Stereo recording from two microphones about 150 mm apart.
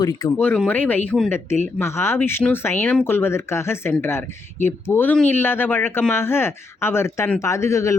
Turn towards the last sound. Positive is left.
turn(degrees=20)  # may be behind; listen again after turning